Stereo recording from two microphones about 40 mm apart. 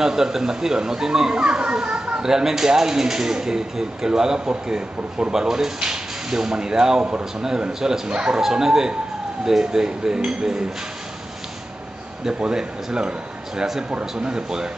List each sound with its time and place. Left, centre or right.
0.0 s speech: centre
2.2 s speech: centre
8.1 s speech: right
8.4 s speech: centre
12.3 s speech: centre
14.1 s speech: centre